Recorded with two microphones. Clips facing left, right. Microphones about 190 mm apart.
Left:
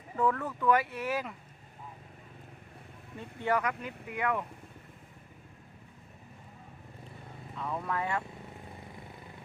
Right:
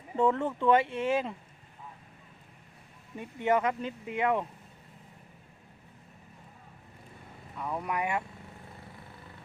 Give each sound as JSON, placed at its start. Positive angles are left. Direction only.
{"t": 0.2, "sound": "speech", "side_deg": -25}
{"t": 3.2, "sound": "speech", "side_deg": -20}
{"t": 7.5, "sound": "speech", "side_deg": -10}